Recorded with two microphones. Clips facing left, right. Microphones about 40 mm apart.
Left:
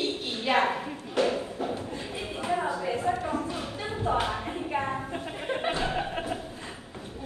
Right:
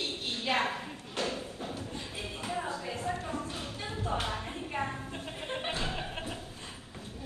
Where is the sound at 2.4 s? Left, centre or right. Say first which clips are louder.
Left 8 dB; left.